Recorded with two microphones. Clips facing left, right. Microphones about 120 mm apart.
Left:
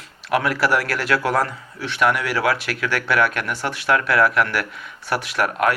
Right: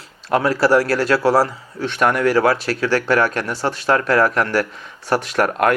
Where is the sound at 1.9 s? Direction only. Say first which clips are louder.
Right 4 dB; 40° right (ahead or behind).